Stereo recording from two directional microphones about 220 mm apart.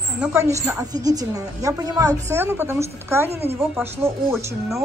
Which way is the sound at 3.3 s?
30° right (ahead or behind).